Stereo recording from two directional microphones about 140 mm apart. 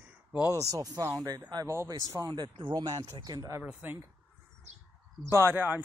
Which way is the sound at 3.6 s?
10° right (ahead or behind).